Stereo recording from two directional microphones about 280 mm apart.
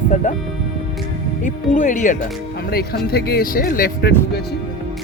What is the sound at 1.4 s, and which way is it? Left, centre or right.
Speech, left.